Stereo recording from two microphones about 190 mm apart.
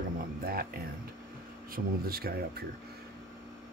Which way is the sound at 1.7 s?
50° right (ahead or behind).